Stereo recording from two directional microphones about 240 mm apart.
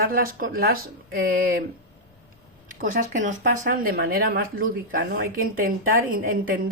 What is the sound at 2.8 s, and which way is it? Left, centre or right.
Speech, right.